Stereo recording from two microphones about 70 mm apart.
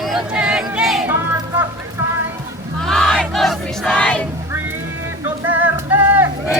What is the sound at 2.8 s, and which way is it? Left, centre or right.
Battle cry, centre.